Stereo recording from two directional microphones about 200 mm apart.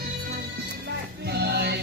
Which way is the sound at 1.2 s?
55° right (ahead or behind).